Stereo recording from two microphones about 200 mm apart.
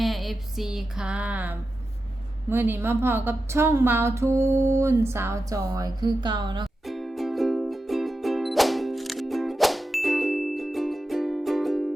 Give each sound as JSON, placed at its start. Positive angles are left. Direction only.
{"t": 0.0, "sound": "a sound", "side_deg": 0}
{"t": 2.5, "sound": "a woman's voice", "side_deg": -10}
{"t": 6.8, "sound": "music", "side_deg": 0}